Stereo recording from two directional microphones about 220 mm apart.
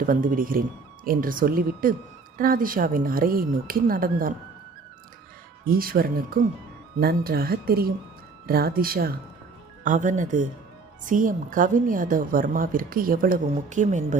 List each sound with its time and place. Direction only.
0.0 s a woman's voice: 40° right (ahead or behind)
5.6 s a woman's voice: 40° right (ahead or behind)